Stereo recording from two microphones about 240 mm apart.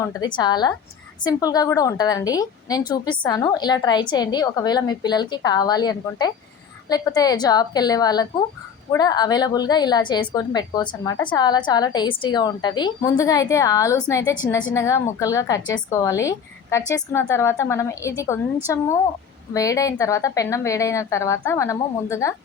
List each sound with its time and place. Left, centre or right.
0.0 s a woman's voice: centre